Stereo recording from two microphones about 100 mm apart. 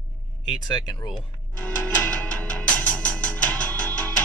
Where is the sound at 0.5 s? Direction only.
40° left (ahead or behind).